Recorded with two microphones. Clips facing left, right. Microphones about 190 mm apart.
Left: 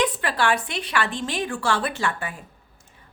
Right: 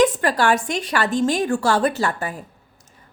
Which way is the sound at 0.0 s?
45° right (ahead or behind).